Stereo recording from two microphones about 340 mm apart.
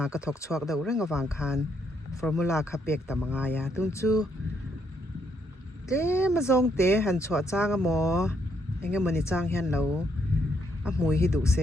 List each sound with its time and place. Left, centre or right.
0.0 s speech: centre
1.4 s speech: centre
6.0 s speech: centre